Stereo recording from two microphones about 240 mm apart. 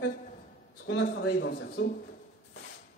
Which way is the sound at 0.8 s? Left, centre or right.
Left.